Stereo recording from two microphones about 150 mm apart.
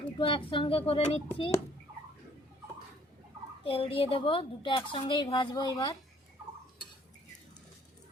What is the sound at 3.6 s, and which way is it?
A woman's voice, 40° left (ahead or behind).